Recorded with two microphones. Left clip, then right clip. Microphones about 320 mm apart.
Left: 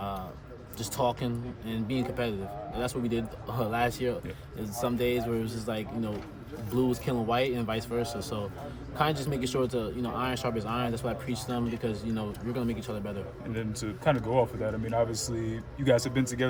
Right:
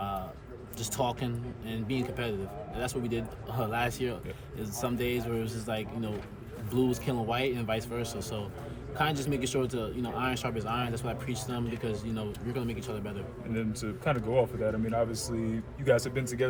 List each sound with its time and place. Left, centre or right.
0.9 s speech: centre
13.5 s speech: left